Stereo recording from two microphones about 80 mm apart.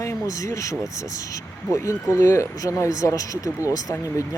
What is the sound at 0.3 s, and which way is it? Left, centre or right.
Speech, left.